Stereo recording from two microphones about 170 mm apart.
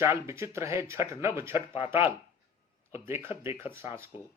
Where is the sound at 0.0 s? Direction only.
15° right (ahead or behind).